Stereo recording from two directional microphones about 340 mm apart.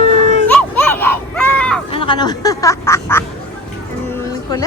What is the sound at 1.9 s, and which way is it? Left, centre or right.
Speech, centre.